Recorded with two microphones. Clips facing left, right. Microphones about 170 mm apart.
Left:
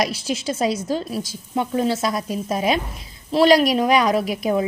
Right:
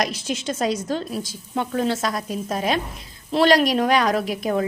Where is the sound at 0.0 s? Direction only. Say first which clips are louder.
Left 2 dB; 5° left (ahead or behind).